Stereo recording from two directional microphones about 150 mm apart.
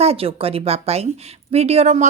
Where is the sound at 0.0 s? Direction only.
40° right (ahead or behind).